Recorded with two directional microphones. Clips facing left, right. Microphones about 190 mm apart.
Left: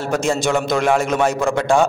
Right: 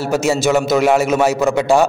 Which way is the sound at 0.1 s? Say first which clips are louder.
Right 3 dB; 5° right (ahead or behind).